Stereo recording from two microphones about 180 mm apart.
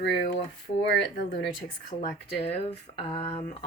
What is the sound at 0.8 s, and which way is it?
Speech, 75° left (ahead or behind).